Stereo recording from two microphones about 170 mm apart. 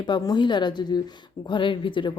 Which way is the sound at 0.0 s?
25° left (ahead or behind).